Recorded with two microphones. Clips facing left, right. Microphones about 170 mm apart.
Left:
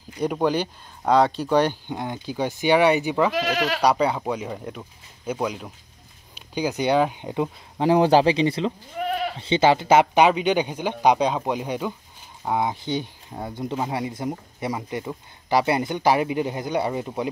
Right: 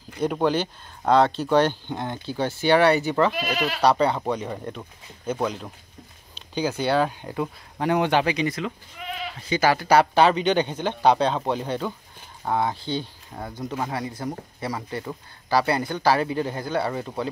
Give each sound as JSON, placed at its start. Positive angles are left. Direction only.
{"t": 0.2, "sound": "speech", "side_deg": 10}
{"t": 3.3, "sound": "speech", "side_deg": 80}
{"t": 3.8, "sound": "speech", "side_deg": 10}
{"t": 8.9, "sound": "goat", "side_deg": 50}
{"t": 9.4, "sound": "speech", "side_deg": 25}